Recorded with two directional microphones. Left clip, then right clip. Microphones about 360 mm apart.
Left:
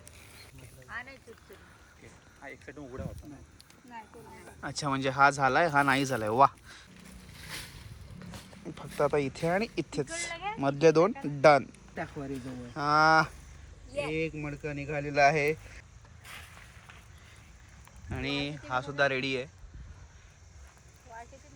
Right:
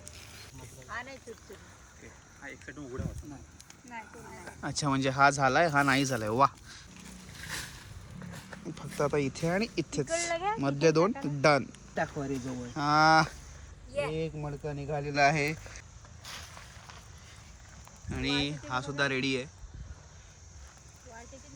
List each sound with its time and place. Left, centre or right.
0.9 s a sound: centre
2.4 s speech: centre
4.6 s speech: centre
8.6 s speech: centre
10.3 s a sound: right
10.6 s speech: centre
11.9 s speech: centre
12.7 s speech: centre
18.1 s speech: centre